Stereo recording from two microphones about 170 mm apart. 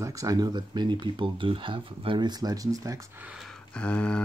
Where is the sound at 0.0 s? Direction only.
20° right (ahead or behind).